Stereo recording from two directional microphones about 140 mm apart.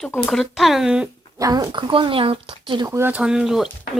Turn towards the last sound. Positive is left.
turn(degrees=-5)  # may be behind; listen again after turning